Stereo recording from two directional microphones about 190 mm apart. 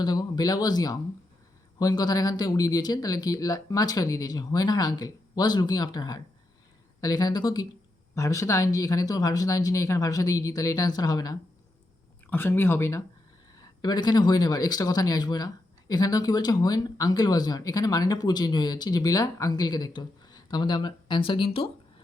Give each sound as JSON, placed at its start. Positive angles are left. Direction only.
{"t": 0.0, "sound": "speech", "side_deg": 20}